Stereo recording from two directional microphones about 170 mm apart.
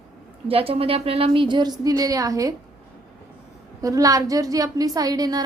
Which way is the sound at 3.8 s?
20° right (ahead or behind).